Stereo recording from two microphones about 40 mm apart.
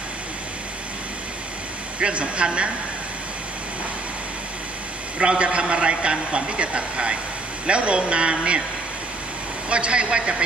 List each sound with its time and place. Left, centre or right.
2.0 s a man's voice: right
5.2 s a man's voice: right
9.7 s a man's voice: right